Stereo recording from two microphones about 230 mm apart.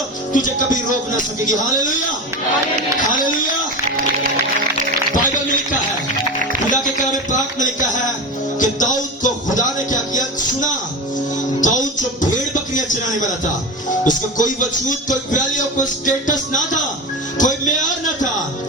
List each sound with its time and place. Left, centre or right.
0.3 s speech: left
7.6 s speech: left
8.5 s music: left
11.6 s speech: left
14.1 s speech: left